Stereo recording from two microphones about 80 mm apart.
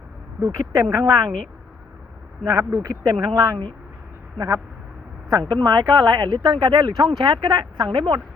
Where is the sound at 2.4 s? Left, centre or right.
Right.